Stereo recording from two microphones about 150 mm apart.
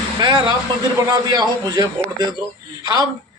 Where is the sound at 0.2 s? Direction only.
30° right (ahead or behind).